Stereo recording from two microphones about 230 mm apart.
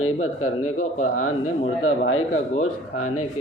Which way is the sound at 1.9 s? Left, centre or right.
Left.